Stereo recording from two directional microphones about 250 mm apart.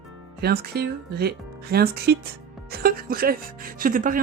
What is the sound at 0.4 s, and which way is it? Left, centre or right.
Speech, right.